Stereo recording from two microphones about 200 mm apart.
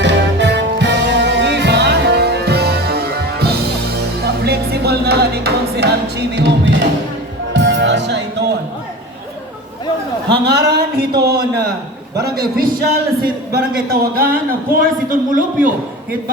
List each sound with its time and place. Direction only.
0.0 s music: 60° right (ahead or behind)
10.3 s a sound: 55° right (ahead or behind)
12.2 s a man's voice: 50° right (ahead or behind)